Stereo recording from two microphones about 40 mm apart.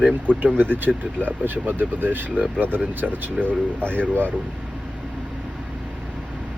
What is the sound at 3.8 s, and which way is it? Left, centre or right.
Speech, left.